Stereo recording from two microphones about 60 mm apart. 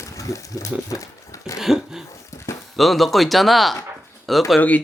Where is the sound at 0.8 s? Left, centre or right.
Left.